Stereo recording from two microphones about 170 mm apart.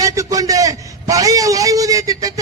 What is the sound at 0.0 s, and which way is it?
A man's voice, 20° right (ahead or behind).